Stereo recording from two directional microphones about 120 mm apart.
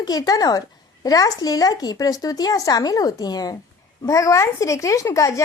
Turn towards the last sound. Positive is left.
turn(degrees=25)  # may be behind; listen again after turning